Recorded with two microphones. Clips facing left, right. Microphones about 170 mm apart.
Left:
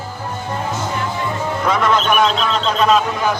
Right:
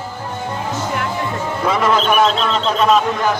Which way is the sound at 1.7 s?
5° right (ahead or behind).